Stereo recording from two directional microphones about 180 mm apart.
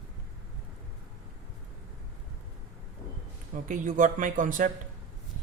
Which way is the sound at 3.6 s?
45° right (ahead or behind).